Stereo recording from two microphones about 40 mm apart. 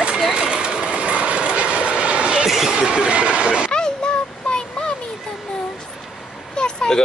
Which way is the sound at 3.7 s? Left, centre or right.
Left.